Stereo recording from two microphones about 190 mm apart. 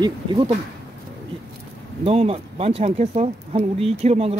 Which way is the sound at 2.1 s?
30° right (ahead or behind).